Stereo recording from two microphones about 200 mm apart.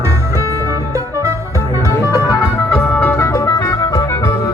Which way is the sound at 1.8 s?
15° left (ahead or behind).